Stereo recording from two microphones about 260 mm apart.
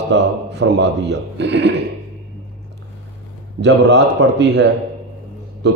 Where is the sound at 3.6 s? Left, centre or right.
Right.